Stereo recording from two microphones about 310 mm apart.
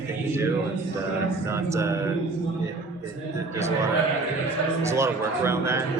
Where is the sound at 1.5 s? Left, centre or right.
Centre.